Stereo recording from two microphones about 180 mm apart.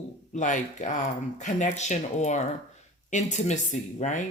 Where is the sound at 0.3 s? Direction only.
45° left (ahead or behind).